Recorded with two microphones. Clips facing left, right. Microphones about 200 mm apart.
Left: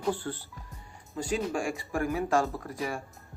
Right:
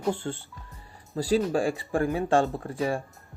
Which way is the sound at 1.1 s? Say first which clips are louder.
Right 6 dB; 35° right (ahead or behind).